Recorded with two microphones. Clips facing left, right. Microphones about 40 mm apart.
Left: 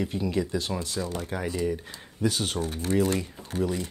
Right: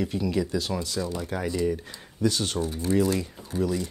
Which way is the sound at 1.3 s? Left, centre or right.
Centre.